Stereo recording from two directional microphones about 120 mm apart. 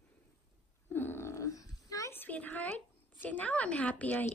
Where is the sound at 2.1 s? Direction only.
15° left (ahead or behind).